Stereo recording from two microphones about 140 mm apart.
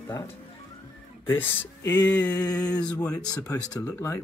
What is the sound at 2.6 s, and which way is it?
Speech, 25° left (ahead or behind).